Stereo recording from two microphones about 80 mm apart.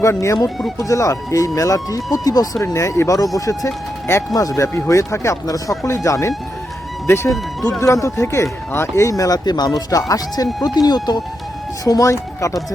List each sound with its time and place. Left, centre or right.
0.0 s speech: left
0.3 s speech: centre
0.8 s speech: left
2.7 s speech: left
7.8 s speech: left
11.9 s speech: left